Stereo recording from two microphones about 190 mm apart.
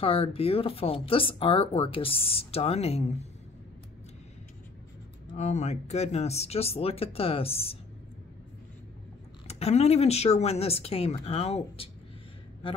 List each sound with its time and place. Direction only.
0.0 s speech: 30° left (ahead or behind)
5.3 s speech: 35° left (ahead or behind)
9.5 s speech: 35° left (ahead or behind)